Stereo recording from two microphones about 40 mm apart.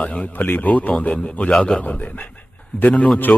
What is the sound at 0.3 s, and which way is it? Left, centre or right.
Speech, left.